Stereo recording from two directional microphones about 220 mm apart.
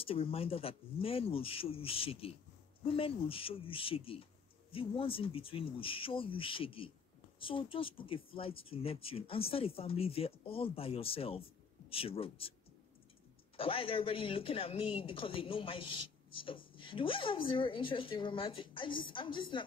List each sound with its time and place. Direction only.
0.0 s speech: 25° left (ahead or behind)
13.6 s speech: 25° left (ahead or behind)